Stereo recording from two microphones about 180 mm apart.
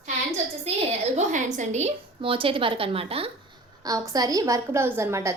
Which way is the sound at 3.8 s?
20° right (ahead or behind).